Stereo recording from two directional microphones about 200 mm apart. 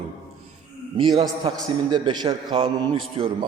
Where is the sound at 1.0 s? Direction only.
20° right (ahead or behind).